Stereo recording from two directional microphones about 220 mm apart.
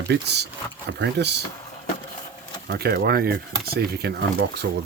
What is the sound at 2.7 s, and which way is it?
Speech, 45° right (ahead or behind).